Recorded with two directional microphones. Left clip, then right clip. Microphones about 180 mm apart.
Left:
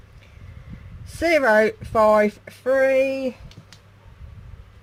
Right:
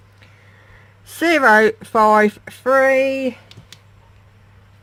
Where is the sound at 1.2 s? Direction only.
40° right (ahead or behind).